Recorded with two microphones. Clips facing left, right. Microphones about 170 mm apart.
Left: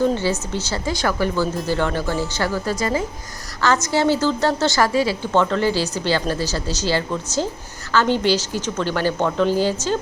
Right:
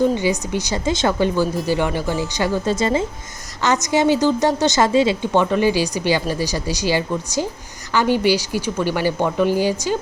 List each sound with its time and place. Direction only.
0.0 s a woman's voice: 15° right (ahead or behind)